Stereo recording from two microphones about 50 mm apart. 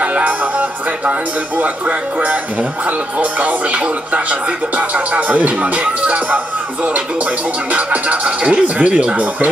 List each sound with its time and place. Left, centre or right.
0.0 s music: right
1.6 s speech: right